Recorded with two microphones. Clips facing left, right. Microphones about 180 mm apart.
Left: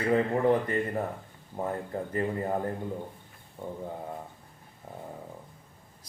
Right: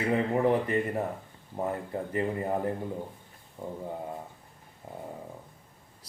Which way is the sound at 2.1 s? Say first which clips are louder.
Even; 15° right (ahead or behind).